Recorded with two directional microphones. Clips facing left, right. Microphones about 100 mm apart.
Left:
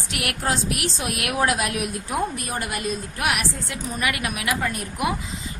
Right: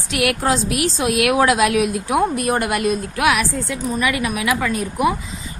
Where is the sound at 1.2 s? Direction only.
90° right.